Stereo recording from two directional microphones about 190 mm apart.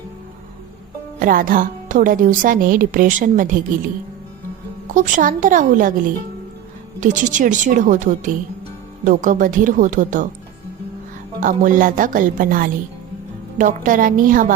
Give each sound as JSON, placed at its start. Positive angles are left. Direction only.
{"t": 1.2, "sound": "a woman's voice", "side_deg": -45}
{"t": 4.9, "sound": "a woman's voice", "side_deg": -45}
{"t": 7.0, "sound": "a woman's voice", "side_deg": -40}
{"t": 11.3, "sound": "a woman's voice", "side_deg": -45}